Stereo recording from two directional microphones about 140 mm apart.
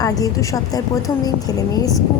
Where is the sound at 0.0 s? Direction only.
25° left (ahead or behind).